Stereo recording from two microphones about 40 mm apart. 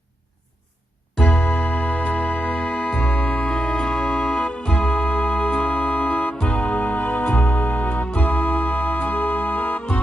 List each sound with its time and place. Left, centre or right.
1.2 s music: left